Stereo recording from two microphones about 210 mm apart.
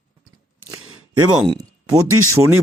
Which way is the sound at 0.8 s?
90° right.